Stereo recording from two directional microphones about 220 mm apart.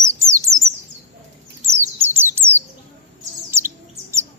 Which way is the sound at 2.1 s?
10° right (ahead or behind).